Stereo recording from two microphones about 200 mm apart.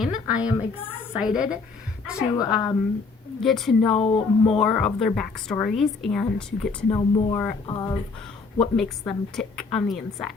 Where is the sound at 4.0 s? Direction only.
30° left (ahead or behind).